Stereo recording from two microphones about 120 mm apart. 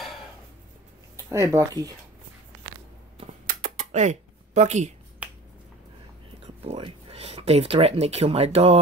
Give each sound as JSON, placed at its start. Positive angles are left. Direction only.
{"t": 1.1, "sound": "speech", "side_deg": -25}
{"t": 3.6, "sound": "a sound", "side_deg": -90}
{"t": 5.2, "sound": "finger snapping", "side_deg": -15}
{"t": 6.4, "sound": "speech", "side_deg": -55}